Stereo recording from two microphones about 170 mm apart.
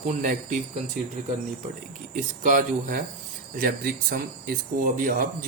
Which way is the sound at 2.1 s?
50° right (ahead or behind).